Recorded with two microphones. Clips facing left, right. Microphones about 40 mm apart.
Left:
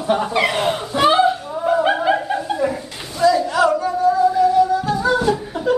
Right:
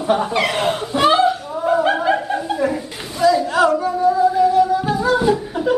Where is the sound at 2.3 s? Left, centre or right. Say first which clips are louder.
Right 1 dB; centre.